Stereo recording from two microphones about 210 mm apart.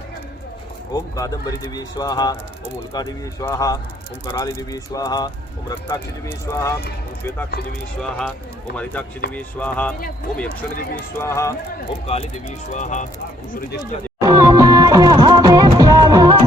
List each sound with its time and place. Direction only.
0.9 s speech: 15° left (ahead or behind)
8.7 s speech: 5° left (ahead or behind)
12.0 s speech: 30° left (ahead or behind)
14.2 s music: 15° right (ahead or behind)